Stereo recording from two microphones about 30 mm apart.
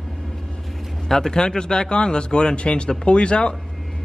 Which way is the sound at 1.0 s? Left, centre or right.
Centre.